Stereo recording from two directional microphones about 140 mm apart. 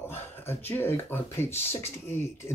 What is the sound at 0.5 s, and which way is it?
Speech, 15° left (ahead or behind).